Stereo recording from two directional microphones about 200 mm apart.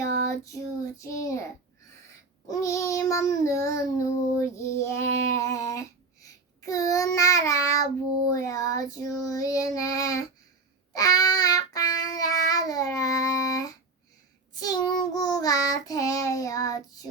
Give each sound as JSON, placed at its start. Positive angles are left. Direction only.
{"t": 0.9, "sound": "child singing", "side_deg": 15}
{"t": 2.5, "sound": "child singing", "side_deg": 15}